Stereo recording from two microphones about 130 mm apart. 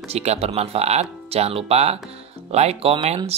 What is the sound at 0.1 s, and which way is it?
Speech, 55° right (ahead or behind).